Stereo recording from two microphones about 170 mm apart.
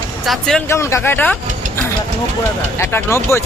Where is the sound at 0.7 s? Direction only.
15° left (ahead or behind).